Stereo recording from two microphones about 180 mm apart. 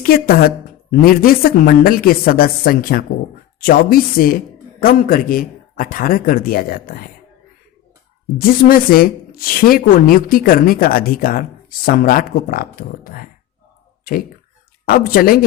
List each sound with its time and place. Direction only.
0.0 s a woman's voice: 55° left (ahead or behind)
8.4 s speech: 55° left (ahead or behind)
14.8 s a woman's voice: 55° left (ahead or behind)